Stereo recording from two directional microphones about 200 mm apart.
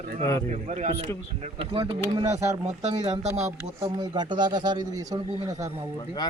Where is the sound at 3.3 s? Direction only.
35° right (ahead or behind).